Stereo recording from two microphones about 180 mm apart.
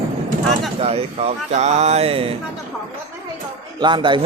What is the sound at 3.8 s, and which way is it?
Speech, 25° right (ahead or behind).